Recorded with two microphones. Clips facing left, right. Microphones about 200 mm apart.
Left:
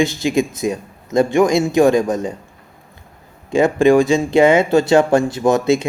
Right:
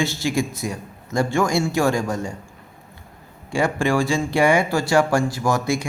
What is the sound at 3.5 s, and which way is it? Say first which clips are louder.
Speech: left 8 dB; 20° left (ahead or behind).